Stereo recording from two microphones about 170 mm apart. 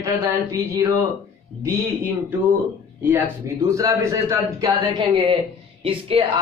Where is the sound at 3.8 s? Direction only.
20° right (ahead or behind).